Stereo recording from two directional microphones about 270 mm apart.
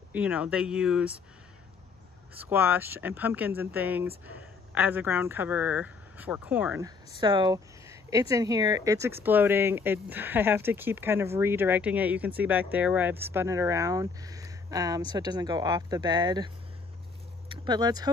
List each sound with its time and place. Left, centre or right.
0.1 s speech: centre
2.4 s speech: centre
17.6 s speech: centre